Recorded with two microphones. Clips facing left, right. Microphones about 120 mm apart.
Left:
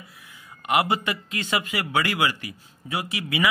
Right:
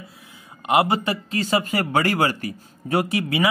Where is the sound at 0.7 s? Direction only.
30° right (ahead or behind).